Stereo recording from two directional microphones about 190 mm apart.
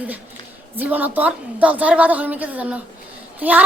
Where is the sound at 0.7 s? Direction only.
10° right (ahead or behind).